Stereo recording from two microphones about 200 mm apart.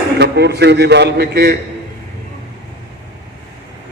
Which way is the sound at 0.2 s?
55° right (ahead or behind).